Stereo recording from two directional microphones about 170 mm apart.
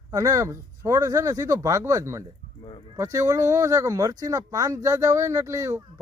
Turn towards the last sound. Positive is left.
turn(degrees=-15)  # may be behind; listen again after turning